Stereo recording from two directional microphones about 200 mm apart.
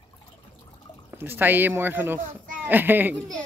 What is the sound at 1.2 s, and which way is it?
Speech, 10° right (ahead or behind).